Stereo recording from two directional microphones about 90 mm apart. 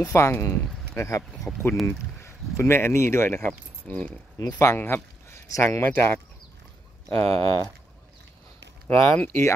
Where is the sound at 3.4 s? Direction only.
15° left (ahead or behind); by 5.8 s 30° left (ahead or behind).